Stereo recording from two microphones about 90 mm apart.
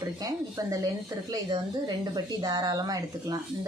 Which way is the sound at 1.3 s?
55° right (ahead or behind).